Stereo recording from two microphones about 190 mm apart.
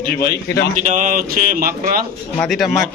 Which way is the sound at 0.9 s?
45° right (ahead or behind).